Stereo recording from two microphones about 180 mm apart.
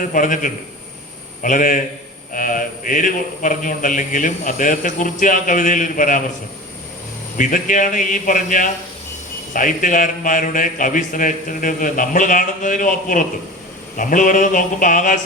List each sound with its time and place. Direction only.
0.0 s a man's voice: 50° left (ahead or behind)
7.3 s a man's voice: 45° left (ahead or behind)